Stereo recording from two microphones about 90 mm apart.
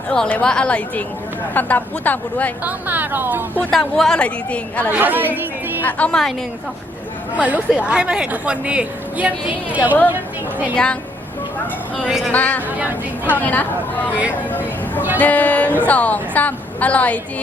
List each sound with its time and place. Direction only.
0.1 s a woman's voice: 10° left (ahead or behind)
2.6 s speech: 20° right (ahead or behind)
3.7 s a woman's voice: 5° left (ahead or behind)
4.9 s a woman's voice: 20° right (ahead or behind)
5.8 s a woman's voice: 15° left (ahead or behind)
7.3 s a woman's voice: 15° right (ahead or behind)
12.0 s a woman's voice: 5° right (ahead or behind)
12.3 s a woman's voice: 20° left (ahead or behind)
15.2 s a woman's voice: 20° left (ahead or behind)